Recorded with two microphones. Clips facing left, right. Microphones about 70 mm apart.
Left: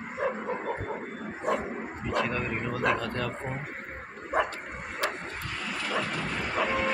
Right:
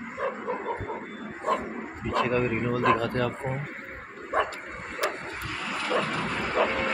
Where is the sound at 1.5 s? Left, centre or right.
Centre.